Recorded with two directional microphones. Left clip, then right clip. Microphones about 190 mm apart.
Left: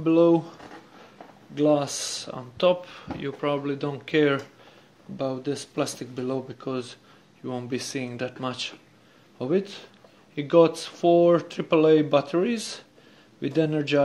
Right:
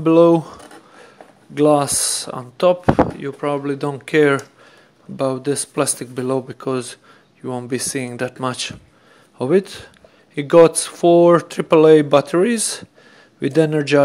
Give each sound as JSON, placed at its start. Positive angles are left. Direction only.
{"t": 0.0, "sound": "speech", "side_deg": -40}